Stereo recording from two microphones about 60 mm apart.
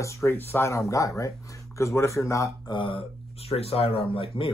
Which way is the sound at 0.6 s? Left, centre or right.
Left.